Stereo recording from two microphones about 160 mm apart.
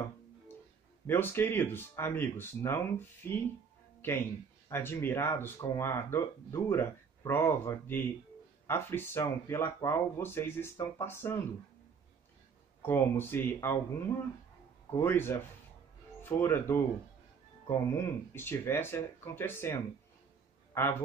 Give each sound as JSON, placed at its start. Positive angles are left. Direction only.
{"t": 1.0, "sound": "speech", "side_deg": 15}
{"t": 12.8, "sound": "speech", "side_deg": 15}